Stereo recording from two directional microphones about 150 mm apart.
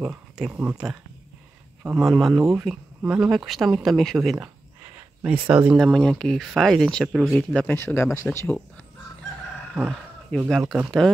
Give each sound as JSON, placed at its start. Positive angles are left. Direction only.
{"t": 0.0, "sound": "speech", "side_deg": -10}
{"t": 7.3, "sound": "speech", "side_deg": 10}
{"t": 9.8, "sound": "a sound", "side_deg": 5}
{"t": 10.5, "sound": "speech", "side_deg": 0}